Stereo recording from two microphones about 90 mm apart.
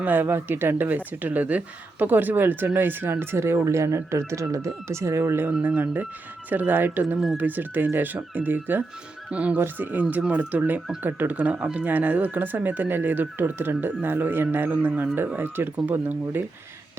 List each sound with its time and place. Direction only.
0.0 s speech: 20° right (ahead or behind)
5.5 s speech: 15° right (ahead or behind)